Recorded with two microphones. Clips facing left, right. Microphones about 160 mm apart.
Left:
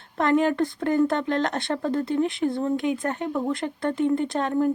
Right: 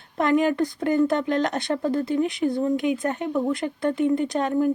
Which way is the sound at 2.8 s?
20° right (ahead or behind).